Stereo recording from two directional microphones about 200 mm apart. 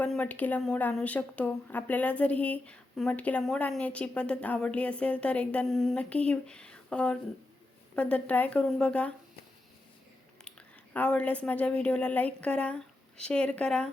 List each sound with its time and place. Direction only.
0.0 s a woman's voice: 10° left (ahead or behind)
10.9 s a woman's voice: 5° left (ahead or behind)